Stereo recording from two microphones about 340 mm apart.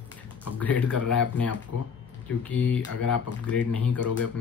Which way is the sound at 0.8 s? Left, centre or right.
Left.